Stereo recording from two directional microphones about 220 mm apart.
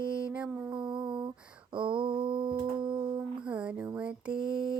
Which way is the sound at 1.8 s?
20° right (ahead or behind).